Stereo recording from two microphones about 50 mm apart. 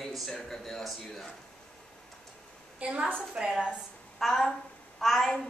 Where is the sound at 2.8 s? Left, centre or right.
Right.